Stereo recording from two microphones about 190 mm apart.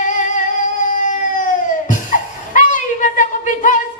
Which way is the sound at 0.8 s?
45° left (ahead or behind).